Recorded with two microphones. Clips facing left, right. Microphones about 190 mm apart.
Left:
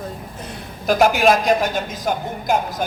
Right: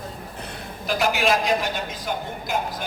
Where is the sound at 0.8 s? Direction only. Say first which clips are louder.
Left 7 dB; 45° left (ahead or behind).